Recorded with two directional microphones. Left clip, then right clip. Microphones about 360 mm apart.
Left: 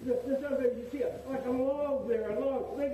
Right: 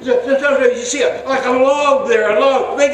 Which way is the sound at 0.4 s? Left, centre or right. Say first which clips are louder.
Right 18 dB; centre.